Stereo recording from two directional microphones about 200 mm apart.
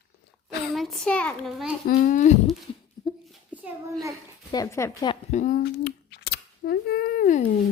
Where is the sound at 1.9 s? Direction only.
45° left (ahead or behind).